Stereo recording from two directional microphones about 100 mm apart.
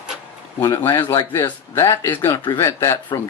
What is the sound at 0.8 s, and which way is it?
Speech, 25° left (ahead or behind).